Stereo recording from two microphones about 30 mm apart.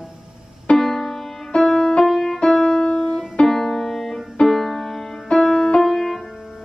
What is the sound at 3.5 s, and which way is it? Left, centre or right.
Music, centre.